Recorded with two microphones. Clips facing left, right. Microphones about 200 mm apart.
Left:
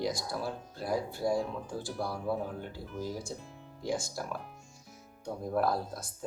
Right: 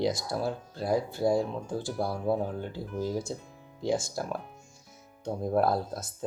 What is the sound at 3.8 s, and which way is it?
Speech, 25° right (ahead or behind).